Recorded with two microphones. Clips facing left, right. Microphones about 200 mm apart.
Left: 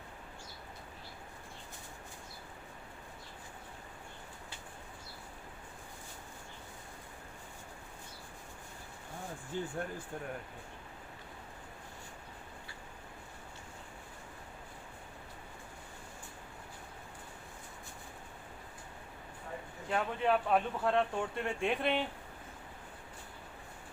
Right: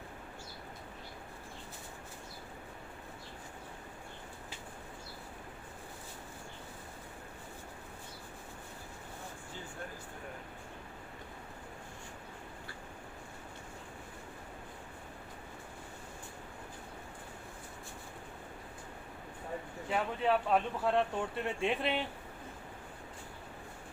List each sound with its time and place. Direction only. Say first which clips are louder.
9.5 s speech: left 12 dB; 55° left (ahead or behind)
19.9 s speech: even; centre (ahead or behind)